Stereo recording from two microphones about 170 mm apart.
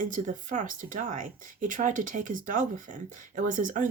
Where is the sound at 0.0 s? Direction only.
50° right (ahead or behind).